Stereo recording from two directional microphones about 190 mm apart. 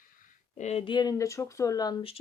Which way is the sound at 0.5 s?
35° left (ahead or behind).